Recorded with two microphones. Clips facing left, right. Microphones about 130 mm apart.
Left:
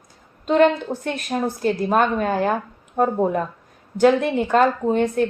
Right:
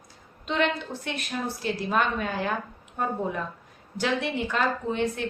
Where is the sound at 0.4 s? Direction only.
45° left (ahead or behind).